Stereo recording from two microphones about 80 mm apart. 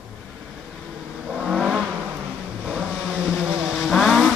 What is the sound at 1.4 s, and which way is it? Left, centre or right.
Vehicle, centre.